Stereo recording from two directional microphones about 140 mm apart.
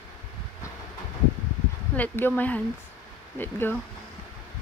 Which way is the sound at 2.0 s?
15° left (ahead or behind).